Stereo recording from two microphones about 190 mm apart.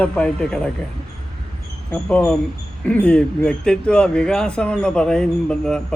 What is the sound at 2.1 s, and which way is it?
Speech, 5° left (ahead or behind).